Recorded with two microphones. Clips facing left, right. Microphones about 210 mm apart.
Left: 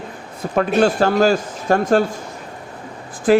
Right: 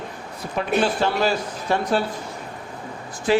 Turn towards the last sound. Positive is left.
turn(degrees=50)  # may be behind; listen again after turning